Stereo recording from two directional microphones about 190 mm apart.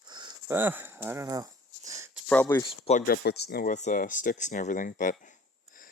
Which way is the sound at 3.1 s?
60° left (ahead or behind).